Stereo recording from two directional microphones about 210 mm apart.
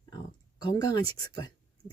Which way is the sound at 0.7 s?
20° left (ahead or behind).